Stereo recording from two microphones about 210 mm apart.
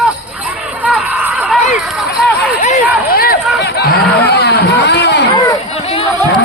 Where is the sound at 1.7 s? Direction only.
Centre (ahead or behind).